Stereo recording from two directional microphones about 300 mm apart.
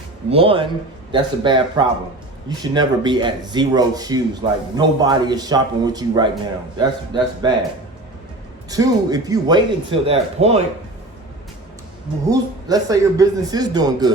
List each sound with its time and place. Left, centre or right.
0.3 s speech: centre
8.7 s speech: centre
12.3 s speech: centre